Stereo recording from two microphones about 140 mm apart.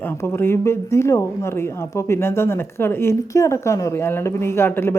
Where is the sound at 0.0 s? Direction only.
15° left (ahead or behind).